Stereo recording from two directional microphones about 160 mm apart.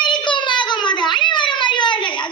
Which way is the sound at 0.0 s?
30° left (ahead or behind).